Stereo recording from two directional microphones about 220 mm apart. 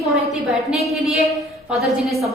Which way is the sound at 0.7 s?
Centre (ahead or behind).